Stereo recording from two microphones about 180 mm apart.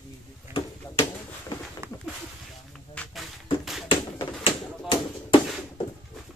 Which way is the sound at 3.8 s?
30° left (ahead or behind).